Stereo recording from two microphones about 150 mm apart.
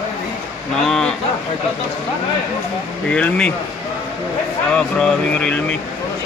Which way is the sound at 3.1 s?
5° left (ahead or behind).